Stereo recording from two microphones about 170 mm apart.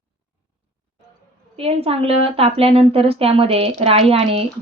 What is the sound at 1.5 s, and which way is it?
A woman's voice, 35° right (ahead or behind).